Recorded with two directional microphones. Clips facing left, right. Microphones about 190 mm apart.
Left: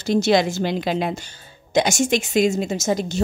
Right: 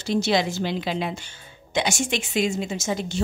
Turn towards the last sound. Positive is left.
turn(degrees=40)  # may be behind; listen again after turning